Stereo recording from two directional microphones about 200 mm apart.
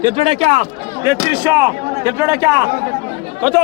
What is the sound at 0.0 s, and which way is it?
Speech, 30° right (ahead or behind).